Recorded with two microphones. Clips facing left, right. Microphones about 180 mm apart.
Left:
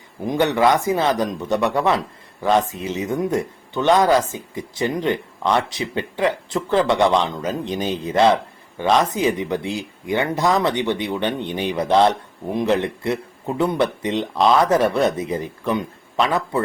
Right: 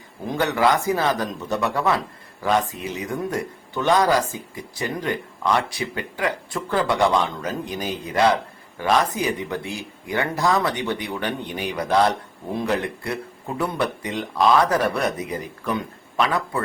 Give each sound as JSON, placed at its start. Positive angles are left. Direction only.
{"t": 0.3, "sound": "speech", "side_deg": 20}